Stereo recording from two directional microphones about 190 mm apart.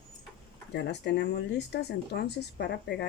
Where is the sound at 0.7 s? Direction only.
65° left (ahead or behind).